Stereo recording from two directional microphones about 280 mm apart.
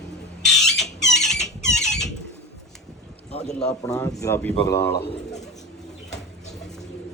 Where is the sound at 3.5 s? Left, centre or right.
Centre.